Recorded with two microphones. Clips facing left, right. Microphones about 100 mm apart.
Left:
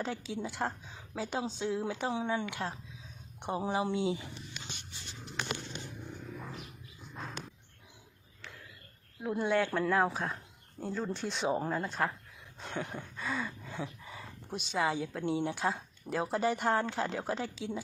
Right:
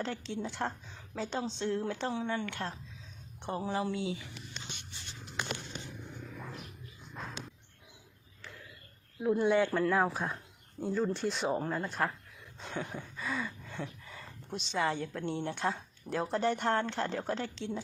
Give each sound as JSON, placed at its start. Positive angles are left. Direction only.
{"t": 0.0, "sound": "speech", "side_deg": 5}
{"t": 9.2, "sound": "a woman's voice", "side_deg": 0}
{"t": 12.5, "sound": "a sound", "side_deg": 0}
{"t": 14.1, "sound": "a woman's voice", "side_deg": 10}